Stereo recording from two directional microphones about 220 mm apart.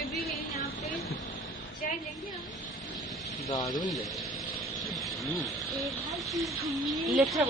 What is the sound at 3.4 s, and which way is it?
Speech, 15° left (ahead or behind).